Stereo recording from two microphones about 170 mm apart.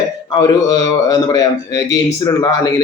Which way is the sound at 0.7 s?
25° left (ahead or behind).